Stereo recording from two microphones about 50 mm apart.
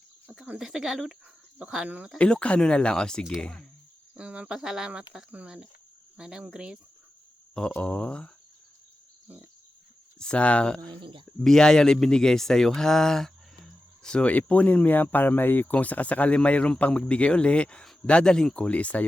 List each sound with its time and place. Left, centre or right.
0.6 s cricket: centre
1.5 s speech: right
2.1 s speech: left
4.1 s cricket: right
7.8 s speech: left
9.2 s pig: right
10.2 s speech: left
11.4 s speech: centre
14.3 s speech: left
15.7 s speech: left; by 18.6 s centre
18.6 s speech: left